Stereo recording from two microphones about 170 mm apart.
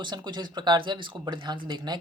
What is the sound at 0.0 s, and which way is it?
Speech, 25° right (ahead or behind).